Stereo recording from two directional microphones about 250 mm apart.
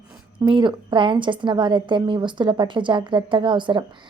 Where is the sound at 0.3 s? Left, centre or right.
Centre.